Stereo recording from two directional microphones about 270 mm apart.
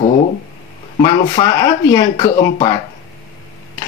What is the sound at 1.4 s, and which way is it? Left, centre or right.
Speech, left.